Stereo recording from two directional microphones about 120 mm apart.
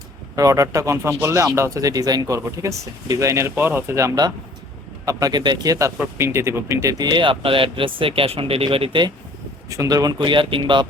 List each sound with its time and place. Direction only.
0.3 s speech: 30° right (ahead or behind)
9.6 s speech: 30° right (ahead or behind); by 10.8 s 45° right (ahead or behind)